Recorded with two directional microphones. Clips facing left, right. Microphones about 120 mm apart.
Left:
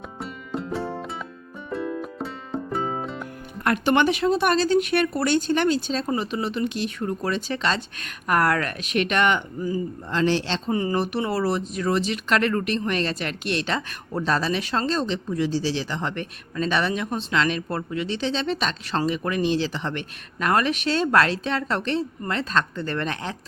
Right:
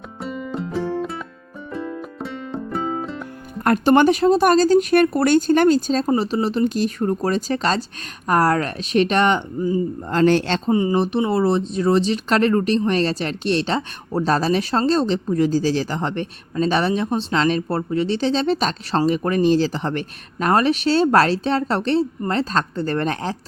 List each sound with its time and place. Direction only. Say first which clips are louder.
0.2 s music: right 5 dB; centre (ahead or behind)
3.6 s speech: right 6 dB; 40° right (ahead or behind)
10.1 s a man's voice: right 6 dB; 50° right (ahead or behind)
10.7 s speech: right 5 dB; 20° right (ahead or behind); by 23.4 s 35° right (ahead or behind)